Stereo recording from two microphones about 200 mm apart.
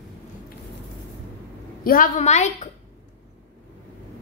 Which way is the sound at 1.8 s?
45° left (ahead or behind).